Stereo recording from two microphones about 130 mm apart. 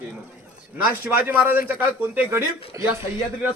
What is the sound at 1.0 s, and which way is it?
A man's voice, 15° right (ahead or behind).